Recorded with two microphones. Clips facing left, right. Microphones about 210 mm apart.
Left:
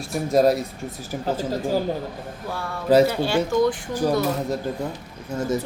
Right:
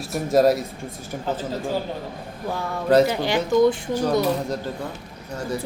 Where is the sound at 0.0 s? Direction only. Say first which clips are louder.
Right 1 dB; centre (ahead or behind).